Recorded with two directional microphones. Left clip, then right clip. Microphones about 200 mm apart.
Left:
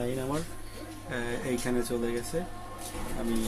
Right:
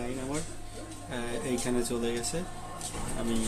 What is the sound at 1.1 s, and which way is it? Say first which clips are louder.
Speech: left 1 dB; 5° left (ahead or behind).